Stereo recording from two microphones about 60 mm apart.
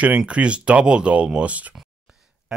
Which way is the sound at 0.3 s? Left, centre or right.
Centre.